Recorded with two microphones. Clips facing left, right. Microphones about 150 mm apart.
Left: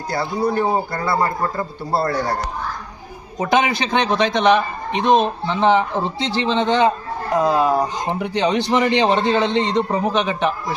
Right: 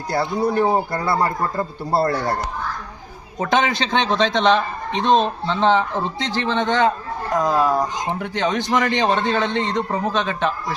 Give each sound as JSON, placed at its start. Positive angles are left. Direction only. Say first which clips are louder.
{"t": 0.3, "sound": "a man's voice", "louder": "even", "side_deg": 0}
{"t": 3.3, "sound": "speech", "louder": "left 1 dB", "side_deg": 15}